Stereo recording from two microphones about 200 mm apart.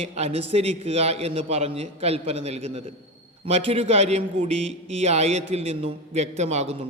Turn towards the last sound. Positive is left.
turn(degrees=-30)  # may be behind; listen again after turning